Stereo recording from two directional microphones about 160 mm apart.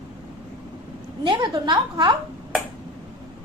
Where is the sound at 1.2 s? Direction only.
30° right (ahead or behind).